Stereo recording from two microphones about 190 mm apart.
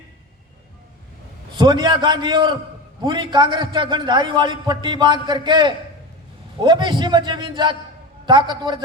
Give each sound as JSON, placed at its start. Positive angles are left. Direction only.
{"t": 1.5, "sound": "a man's voice", "side_deg": -25}